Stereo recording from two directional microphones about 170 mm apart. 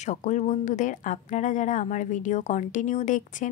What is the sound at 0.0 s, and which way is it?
A woman's voice, 45° left (ahead or behind).